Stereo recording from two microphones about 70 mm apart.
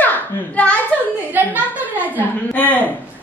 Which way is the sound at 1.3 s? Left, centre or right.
Right.